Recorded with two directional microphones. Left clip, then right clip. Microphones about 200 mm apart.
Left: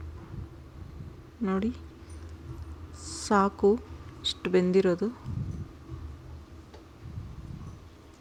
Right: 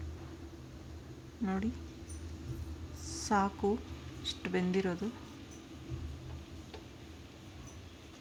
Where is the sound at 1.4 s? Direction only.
20° left (ahead or behind).